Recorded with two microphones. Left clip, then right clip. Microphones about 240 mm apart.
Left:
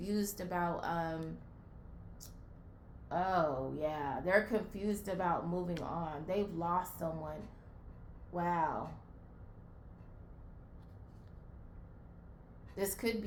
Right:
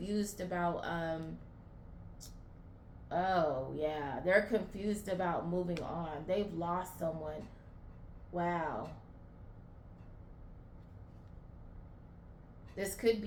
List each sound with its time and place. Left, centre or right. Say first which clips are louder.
0.0 s speech: even; left
3.1 s speech: right 1 dB; left
12.7 s speech: left 1 dB; left